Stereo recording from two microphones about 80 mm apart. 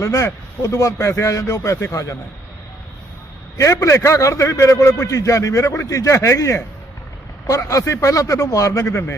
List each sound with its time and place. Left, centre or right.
0.0 s a man's voice: left
3.6 s a man's voice: left